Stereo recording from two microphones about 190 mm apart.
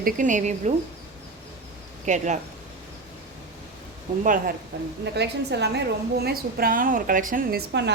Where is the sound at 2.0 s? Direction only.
40° right (ahead or behind).